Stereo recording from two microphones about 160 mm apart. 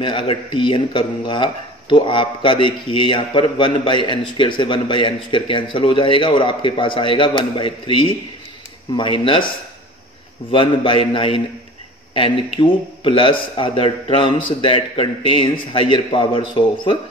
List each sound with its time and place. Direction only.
0.0 s speech: 30° left (ahead or behind)
10.5 s speech: 35° left (ahead or behind)